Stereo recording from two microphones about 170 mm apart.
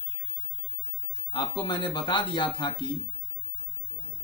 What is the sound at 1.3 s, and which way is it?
Speech, 25° left (ahead or behind).